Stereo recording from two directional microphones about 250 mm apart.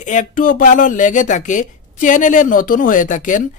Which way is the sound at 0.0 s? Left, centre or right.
Left.